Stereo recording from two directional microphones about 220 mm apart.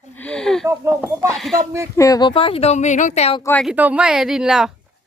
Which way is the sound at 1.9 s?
15° left (ahead or behind).